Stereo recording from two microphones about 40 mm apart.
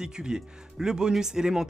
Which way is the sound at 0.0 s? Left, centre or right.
Centre.